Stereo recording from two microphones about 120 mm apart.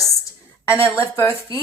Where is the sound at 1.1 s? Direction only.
25° left (ahead or behind).